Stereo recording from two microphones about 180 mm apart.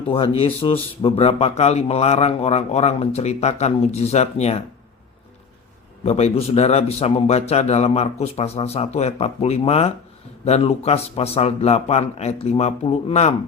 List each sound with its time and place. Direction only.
0.1 s a man's voice: 30° left (ahead or behind)
6.0 s a man's voice: 35° left (ahead or behind)